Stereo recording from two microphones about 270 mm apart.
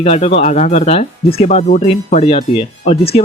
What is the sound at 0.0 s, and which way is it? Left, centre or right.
Speech, left.